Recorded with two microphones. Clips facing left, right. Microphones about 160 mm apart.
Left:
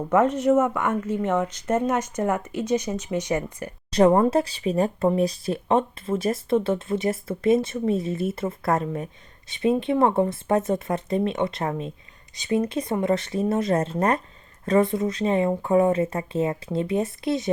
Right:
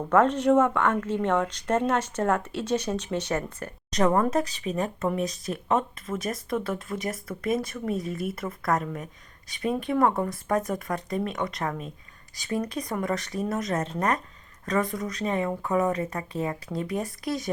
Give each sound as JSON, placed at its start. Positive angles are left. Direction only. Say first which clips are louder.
{"t": 0.1, "sound": "speech", "louder": "left 1 dB", "side_deg": 10}
{"t": 3.9, "sound": "speech", "louder": "left 5 dB", "side_deg": 25}